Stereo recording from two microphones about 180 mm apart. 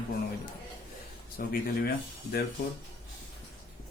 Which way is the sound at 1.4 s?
55° left (ahead or behind).